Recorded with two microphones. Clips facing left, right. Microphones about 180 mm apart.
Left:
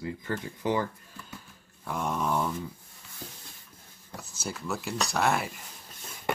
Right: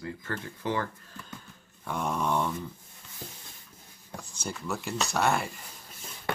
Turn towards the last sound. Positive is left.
turn(degrees=0)  # may be behind; listen again after turning